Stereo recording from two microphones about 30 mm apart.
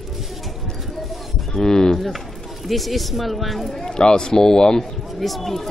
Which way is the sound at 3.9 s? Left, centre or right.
Left.